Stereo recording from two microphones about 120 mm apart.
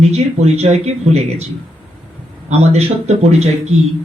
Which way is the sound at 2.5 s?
65° right (ahead or behind).